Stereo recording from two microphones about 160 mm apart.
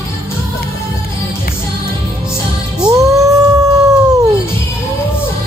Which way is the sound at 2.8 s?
20° right (ahead or behind).